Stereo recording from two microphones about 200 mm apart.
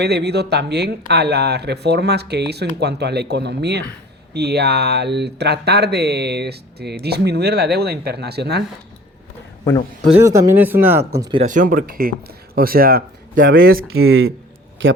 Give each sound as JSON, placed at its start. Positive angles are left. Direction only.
{"t": 0.0, "sound": "speech", "side_deg": -55}
{"t": 10.0, "sound": "speech", "side_deg": -15}
{"t": 11.3, "sound": "speech", "side_deg": -40}
{"t": 13.4, "sound": "speech", "side_deg": -75}